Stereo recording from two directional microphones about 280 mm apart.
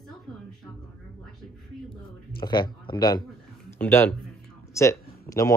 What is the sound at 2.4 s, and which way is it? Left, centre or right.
A man's voice, centre.